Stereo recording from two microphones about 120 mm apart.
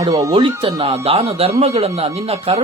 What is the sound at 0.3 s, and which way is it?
Speech, 45° right (ahead or behind).